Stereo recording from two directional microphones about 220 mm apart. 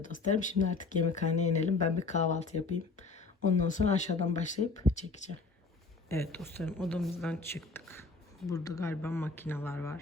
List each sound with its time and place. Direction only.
0.0 s speech: 35° left (ahead or behind)
6.2 s speech: 5° left (ahead or behind)